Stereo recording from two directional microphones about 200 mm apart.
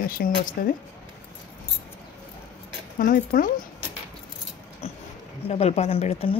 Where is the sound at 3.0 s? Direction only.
45° left (ahead or behind).